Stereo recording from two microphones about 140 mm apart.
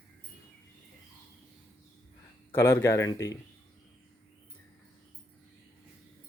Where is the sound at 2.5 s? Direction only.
15° left (ahead or behind).